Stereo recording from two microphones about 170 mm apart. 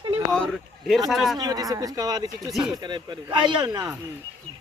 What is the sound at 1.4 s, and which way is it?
Speech, 20° right (ahead or behind).